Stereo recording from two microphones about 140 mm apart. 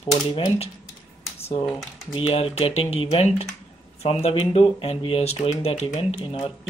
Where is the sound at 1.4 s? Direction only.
45° left (ahead or behind).